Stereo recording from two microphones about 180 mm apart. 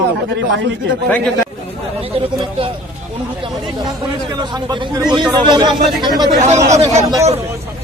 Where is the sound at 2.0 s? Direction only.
30° right (ahead or behind).